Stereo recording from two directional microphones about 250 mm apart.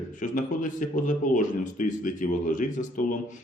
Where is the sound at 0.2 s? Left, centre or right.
Left.